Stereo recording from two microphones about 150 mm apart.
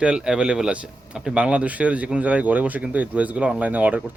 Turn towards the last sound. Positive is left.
turn(degrees=-10)  # may be behind; listen again after turning